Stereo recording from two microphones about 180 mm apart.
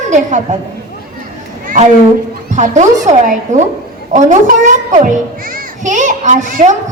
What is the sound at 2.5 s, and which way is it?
A child's voice, 40° right (ahead or behind).